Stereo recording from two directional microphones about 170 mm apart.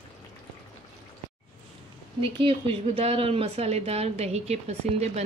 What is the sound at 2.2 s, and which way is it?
A woman's voice, 30° right (ahead or behind).